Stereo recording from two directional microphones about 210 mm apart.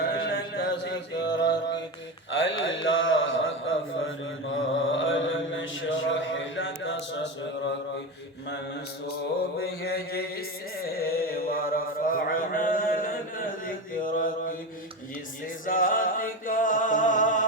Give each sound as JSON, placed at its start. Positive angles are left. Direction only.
{"t": 0.0, "sound": "a sound", "side_deg": 55}
{"t": 1.2, "sound": "mantra", "side_deg": 55}
{"t": 2.3, "sound": "a sound", "side_deg": 65}
{"t": 4.9, "sound": "mantra", "side_deg": 65}
{"t": 9.6, "sound": "mantra", "side_deg": 50}
{"t": 15.6, "sound": "music", "side_deg": 40}